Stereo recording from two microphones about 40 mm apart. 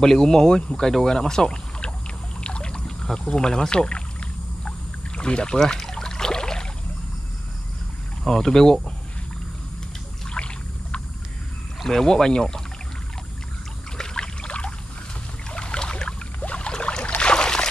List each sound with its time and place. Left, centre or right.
0.0 s speech: centre
2.4 s trickle: left
3.3 s rowboat: left
8.2 s speech: centre
10.3 s rowboat: left
11.8 s speech: centre
13.9 s rowboat: centre
15.5 s boat: left
16.3 s boat: left
16.6 s boat: left